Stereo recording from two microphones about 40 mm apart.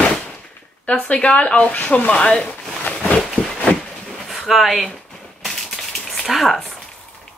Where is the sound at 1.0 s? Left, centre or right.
Left.